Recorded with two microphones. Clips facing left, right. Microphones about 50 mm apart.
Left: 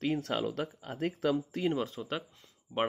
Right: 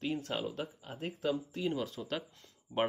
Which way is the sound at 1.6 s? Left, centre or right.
Left.